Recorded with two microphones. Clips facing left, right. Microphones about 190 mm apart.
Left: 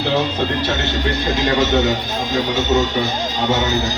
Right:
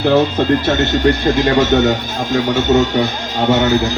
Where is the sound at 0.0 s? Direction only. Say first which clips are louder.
Right 6 dB; 50° right (ahead or behind).